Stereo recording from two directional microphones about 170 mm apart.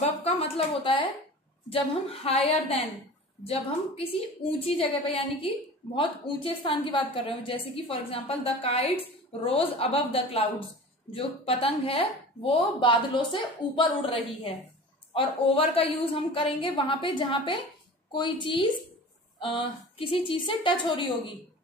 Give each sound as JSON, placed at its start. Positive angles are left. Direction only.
{"t": 0.0, "sound": "a woman's voice", "side_deg": 35}